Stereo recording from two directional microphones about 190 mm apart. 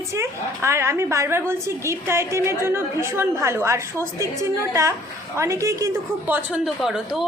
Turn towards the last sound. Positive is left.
turn(degrees=-5)  # may be behind; listen again after turning